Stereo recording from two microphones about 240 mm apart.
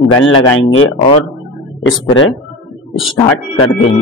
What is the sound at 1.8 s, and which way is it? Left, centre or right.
Speech, left.